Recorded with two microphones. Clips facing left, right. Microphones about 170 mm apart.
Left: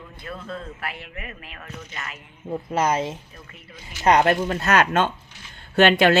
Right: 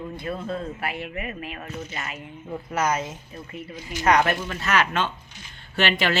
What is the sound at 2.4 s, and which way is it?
Speech, 30° left (ahead or behind).